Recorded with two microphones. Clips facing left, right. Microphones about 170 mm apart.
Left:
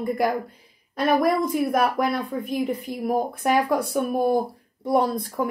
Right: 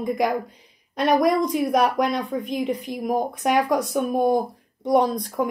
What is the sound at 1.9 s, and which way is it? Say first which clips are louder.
Speech: right 1 dB; 20° right (ahead or behind).